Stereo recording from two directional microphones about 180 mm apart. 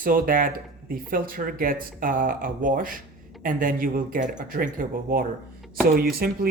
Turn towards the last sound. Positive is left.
turn(degrees=-55)  # may be behind; listen again after turning